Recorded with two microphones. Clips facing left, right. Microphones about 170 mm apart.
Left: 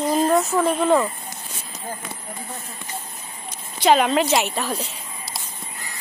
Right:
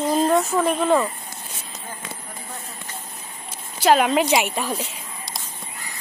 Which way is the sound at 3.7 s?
5° right (ahead or behind).